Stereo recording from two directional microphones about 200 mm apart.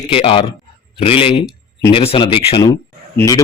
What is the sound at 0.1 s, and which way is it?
A man's voice, 30° left (ahead or behind).